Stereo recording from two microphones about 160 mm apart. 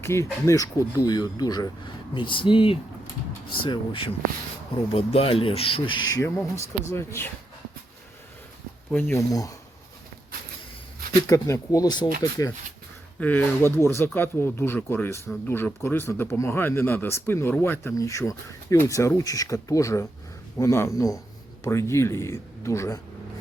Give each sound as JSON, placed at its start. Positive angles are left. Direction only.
{"t": 0.0, "sound": "speech", "side_deg": 15}
{"t": 8.9, "sound": "speech", "side_deg": 10}
{"t": 11.3, "sound": "speech", "side_deg": 20}
{"t": 13.1, "sound": "speech", "side_deg": 10}